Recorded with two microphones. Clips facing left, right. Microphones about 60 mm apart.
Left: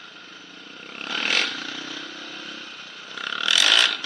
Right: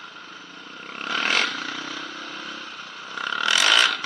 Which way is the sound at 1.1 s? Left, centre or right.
Right.